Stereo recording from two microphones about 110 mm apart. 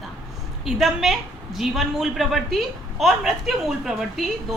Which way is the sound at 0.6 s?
Centre (ahead or behind).